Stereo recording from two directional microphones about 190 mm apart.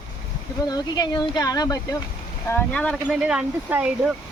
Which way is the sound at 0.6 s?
20° left (ahead or behind).